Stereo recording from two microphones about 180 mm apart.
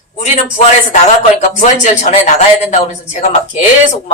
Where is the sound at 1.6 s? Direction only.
40° left (ahead or behind).